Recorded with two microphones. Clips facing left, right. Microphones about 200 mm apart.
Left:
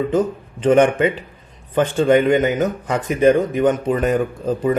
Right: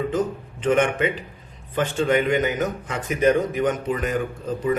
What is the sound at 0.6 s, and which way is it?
Speech, 35° left (ahead or behind).